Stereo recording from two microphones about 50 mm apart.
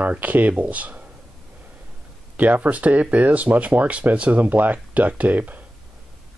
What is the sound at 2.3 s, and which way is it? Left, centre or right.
Speech, right.